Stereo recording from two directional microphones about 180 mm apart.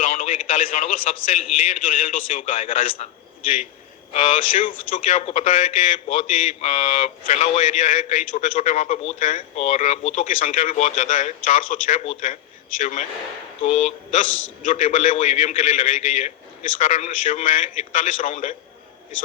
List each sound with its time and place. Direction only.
0.0 s radio: 45° left (ahead or behind)
0.4 s a man's voice: 45° left (ahead or behind)
4.1 s a man's voice: 40° left (ahead or behind)